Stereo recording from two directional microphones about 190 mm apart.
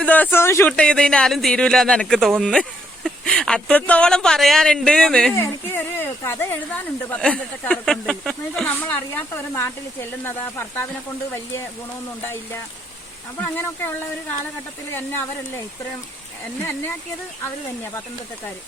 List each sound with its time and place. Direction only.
0.0 s speech: 10° left (ahead or behind)
12.2 s speech: 10° left (ahead or behind)